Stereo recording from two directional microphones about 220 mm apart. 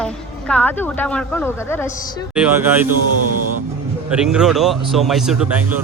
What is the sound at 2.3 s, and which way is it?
Speech, 5° right (ahead or behind).